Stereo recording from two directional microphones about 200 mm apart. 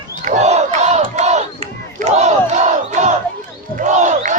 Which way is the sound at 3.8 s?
35° right (ahead or behind).